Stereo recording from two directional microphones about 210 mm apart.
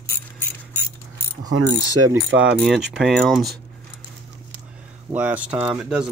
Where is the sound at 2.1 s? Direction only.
65° right (ahead or behind).